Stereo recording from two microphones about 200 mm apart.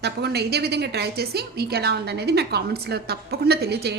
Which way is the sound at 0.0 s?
55° right (ahead or behind).